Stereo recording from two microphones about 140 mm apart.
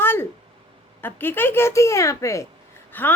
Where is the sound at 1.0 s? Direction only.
15° left (ahead or behind).